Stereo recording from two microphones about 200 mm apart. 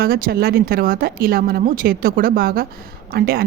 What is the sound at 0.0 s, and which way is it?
Speech, 45° right (ahead or behind).